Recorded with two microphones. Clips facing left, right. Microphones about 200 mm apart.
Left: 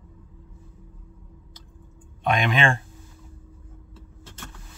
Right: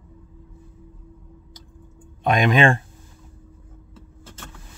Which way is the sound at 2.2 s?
40° right (ahead or behind).